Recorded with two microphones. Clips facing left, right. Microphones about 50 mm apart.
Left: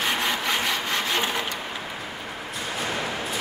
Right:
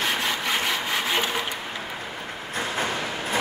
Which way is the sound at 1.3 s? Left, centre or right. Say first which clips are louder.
Even; centre.